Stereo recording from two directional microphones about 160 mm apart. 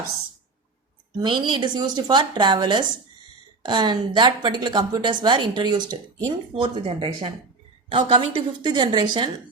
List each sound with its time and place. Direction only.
1.2 s a woman's voice: 30° right (ahead or behind)